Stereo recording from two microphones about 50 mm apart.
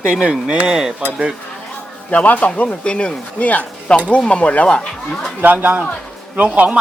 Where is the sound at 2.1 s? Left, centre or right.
Left.